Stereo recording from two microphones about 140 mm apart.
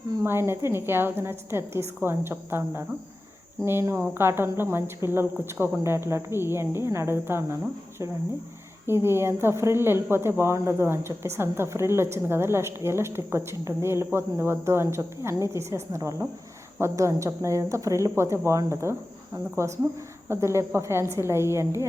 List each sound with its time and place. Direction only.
0.2 s speech: 15° right (ahead or behind)
8.9 s a woman's voice: 15° right (ahead or behind)